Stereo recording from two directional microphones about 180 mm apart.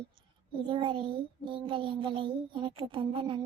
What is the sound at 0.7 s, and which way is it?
Child singing, 25° right (ahead or behind).